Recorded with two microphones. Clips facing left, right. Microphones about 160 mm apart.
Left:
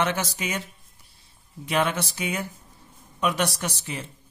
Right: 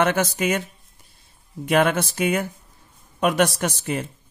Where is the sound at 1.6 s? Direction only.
55° right (ahead or behind).